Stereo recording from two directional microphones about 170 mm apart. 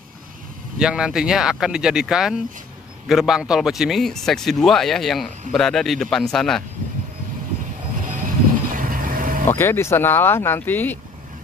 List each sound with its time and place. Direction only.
0.7 s speech: 5° right (ahead or behind)
8.0 s vehicle: 50° right (ahead or behind)
9.5 s speech: 15° left (ahead or behind)